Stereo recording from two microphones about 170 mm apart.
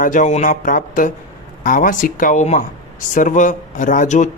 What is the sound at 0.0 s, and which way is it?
Speech, 50° left (ahead or behind).